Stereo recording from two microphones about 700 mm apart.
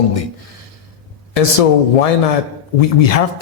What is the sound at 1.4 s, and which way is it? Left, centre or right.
Speech, left.